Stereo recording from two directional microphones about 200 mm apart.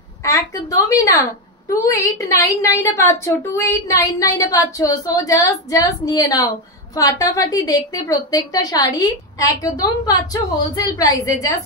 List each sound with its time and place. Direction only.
0.2 s a woman's voice: 15° left (ahead or behind)